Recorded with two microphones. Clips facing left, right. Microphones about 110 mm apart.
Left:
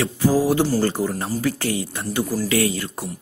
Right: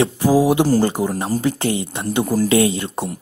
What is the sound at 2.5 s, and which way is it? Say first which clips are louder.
Speech: right 5 dB; 25° right (ahead or behind).